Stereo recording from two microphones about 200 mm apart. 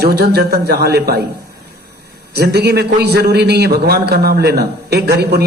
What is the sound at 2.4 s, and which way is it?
A man's voice, 55° right (ahead or behind).